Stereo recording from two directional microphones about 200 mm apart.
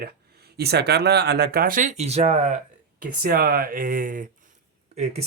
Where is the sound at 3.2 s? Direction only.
50° right (ahead or behind).